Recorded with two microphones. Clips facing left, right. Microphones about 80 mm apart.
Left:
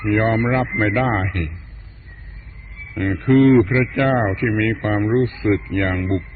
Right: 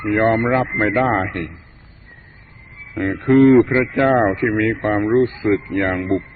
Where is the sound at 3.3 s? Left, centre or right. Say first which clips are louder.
Right 2 dB; centre.